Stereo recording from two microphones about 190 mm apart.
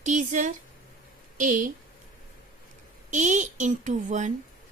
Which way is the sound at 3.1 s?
40° right (ahead or behind).